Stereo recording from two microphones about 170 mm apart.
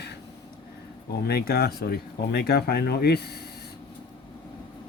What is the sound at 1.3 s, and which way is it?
Speech, 70° left (ahead or behind).